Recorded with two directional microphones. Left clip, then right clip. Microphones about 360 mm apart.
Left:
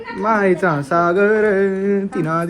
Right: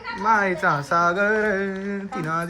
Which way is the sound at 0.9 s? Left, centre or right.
Centre.